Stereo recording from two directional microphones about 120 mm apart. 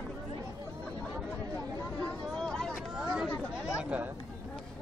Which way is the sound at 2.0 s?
5° left (ahead or behind).